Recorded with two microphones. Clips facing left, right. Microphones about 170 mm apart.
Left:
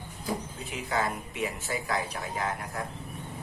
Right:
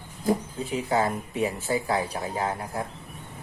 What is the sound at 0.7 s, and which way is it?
Speech, 30° right (ahead or behind).